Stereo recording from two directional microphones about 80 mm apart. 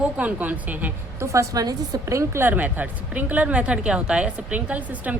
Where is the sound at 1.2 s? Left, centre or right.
Right.